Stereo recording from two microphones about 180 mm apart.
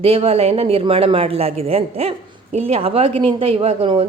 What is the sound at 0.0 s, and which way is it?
Speech, 30° right (ahead or behind).